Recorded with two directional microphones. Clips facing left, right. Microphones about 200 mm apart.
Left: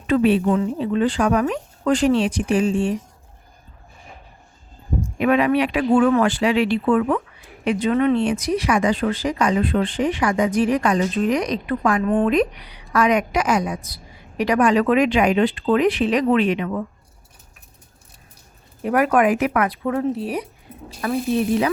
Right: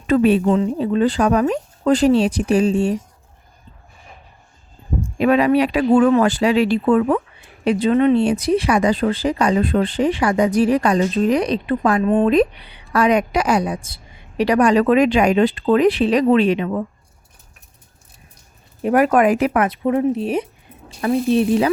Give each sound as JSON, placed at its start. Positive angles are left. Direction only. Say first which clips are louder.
{"t": 0.1, "sound": "a woman's voice", "louder": "right 2 dB", "side_deg": -40}
{"t": 0.4, "sound": "speech", "louder": "right 3 dB", "side_deg": -25}
{"t": 0.8, "sound": "speech", "louder": "right 3 dB", "side_deg": -35}
{"t": 5.1, "sound": "speech", "louder": "right 3 dB", "side_deg": -35}
{"t": 18.8, "sound": "speech", "louder": "right 3 dB", "side_deg": -25}